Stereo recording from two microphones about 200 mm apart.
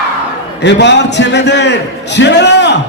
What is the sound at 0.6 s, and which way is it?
A man's voice, 60° left (ahead or behind).